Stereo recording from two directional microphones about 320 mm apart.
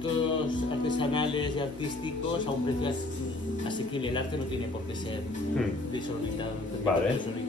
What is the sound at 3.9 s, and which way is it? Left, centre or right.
Speech, centre.